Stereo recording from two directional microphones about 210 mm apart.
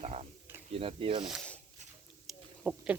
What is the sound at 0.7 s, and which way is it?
Speech, 25° right (ahead or behind).